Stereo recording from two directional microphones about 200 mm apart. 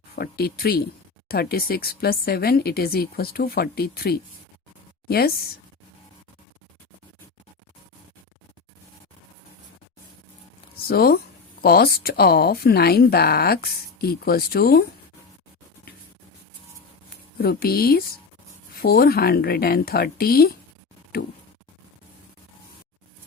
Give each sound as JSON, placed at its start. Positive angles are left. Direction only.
{"t": 0.2, "sound": "speech", "side_deg": 50}
{"t": 10.8, "sound": "speech", "side_deg": 50}
{"t": 17.3, "sound": "speech", "side_deg": 50}